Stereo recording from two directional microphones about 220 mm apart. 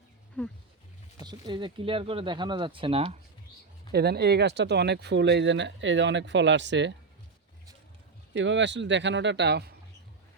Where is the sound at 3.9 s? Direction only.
45° right (ahead or behind).